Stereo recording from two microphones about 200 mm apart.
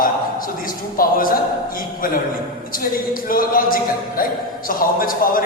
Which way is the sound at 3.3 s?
45° left (ahead or behind).